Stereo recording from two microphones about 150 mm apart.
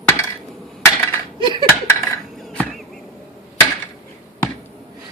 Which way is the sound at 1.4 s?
30° right (ahead or behind).